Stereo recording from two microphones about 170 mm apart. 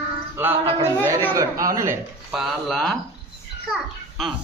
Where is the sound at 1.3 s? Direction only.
20° right (ahead or behind).